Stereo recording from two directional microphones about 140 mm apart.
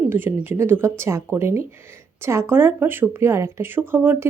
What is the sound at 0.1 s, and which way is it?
Speech, 15° right (ahead or behind).